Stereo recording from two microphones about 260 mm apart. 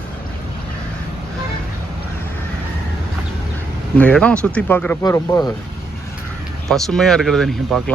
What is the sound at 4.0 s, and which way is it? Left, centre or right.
Speech, centre.